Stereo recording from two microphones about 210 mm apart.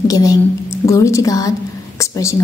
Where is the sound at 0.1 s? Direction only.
15° left (ahead or behind).